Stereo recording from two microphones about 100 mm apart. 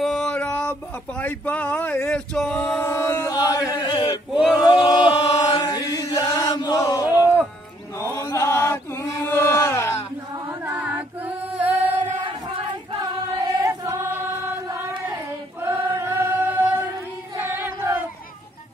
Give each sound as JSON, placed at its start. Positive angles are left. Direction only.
{"t": 0.0, "sound": "a sound", "side_deg": 5}
{"t": 2.8, "sound": "chant", "side_deg": 25}
{"t": 3.3, "sound": "chant", "side_deg": 40}
{"t": 3.7, "sound": "male singing", "side_deg": 45}
{"t": 4.6, "sound": "chant", "side_deg": 45}
{"t": 7.2, "sound": "music", "side_deg": -15}
{"t": 8.0, "sound": "chant", "side_deg": 30}
{"t": 10.6, "sound": "music", "side_deg": -20}
{"t": 12.2, "sound": "a sound", "side_deg": -55}
{"t": 13.6, "sound": "choir", "side_deg": -30}
{"t": 15.6, "sound": "choir", "side_deg": -25}